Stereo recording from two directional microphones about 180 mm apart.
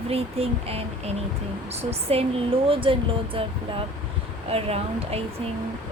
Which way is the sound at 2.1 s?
35° right (ahead or behind).